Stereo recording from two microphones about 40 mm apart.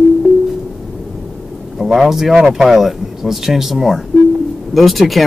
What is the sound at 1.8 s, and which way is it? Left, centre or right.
Speech, centre.